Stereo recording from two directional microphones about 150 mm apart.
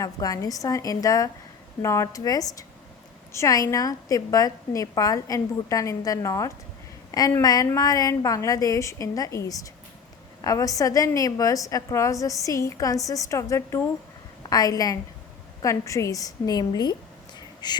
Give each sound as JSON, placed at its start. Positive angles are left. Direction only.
{"t": 0.0, "sound": "a woman's voice", "side_deg": 25}